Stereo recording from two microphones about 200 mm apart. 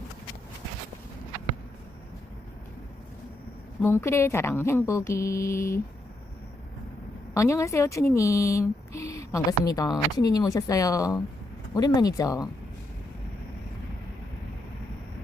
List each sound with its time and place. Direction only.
3.8 s speech: 10° left (ahead or behind)
7.3 s speech: 15° left (ahead or behind)